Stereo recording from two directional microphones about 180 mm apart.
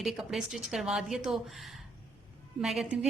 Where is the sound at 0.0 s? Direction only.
Centre (ahead or behind).